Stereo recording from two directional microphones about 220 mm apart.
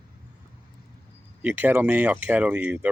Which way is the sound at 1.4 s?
10° right (ahead or behind).